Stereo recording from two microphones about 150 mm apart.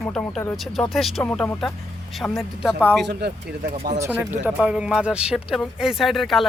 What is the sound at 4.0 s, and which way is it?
Speech, 10° right (ahead or behind).